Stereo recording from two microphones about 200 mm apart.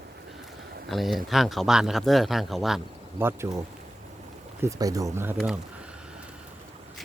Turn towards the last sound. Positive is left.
turn(degrees=-5)  # may be behind; listen again after turning